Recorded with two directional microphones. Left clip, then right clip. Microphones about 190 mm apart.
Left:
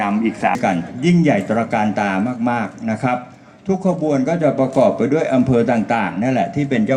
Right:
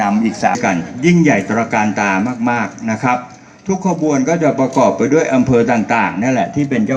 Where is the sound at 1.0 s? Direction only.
55° left (ahead or behind).